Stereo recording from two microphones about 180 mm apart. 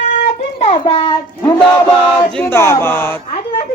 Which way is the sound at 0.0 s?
40° left (ahead or behind).